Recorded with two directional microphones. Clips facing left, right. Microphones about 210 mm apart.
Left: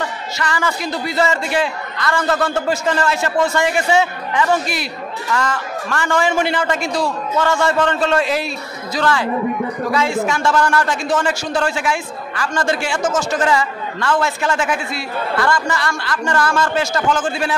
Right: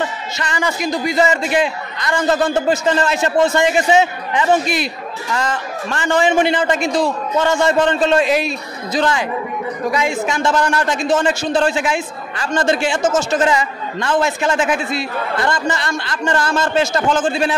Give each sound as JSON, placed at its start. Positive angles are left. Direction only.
{"t": 0.4, "sound": "a man's voice", "side_deg": -20}